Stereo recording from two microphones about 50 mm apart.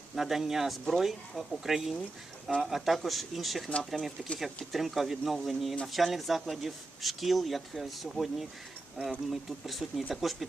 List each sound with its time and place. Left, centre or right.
0.2 s speech: centre